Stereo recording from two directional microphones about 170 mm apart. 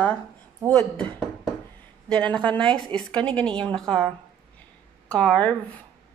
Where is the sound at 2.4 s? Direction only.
30° right (ahead or behind).